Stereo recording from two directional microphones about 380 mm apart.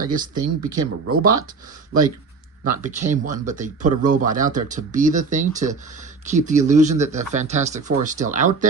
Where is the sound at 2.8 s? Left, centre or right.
Centre.